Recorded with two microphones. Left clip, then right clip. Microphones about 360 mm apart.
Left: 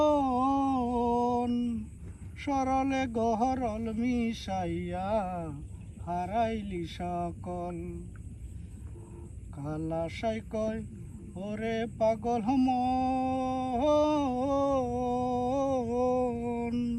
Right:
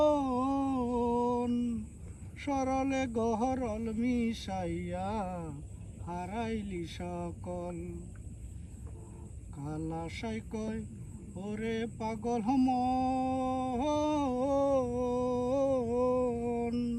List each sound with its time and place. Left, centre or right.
0.1 s music: centre
2.4 s speech: centre
9.6 s speech: centre
11.3 s a sound: centre
16.2 s music: centre